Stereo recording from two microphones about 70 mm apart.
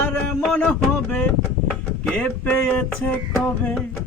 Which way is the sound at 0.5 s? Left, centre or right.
Left.